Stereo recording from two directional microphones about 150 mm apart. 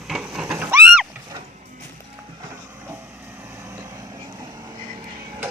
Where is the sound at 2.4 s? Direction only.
15° right (ahead or behind).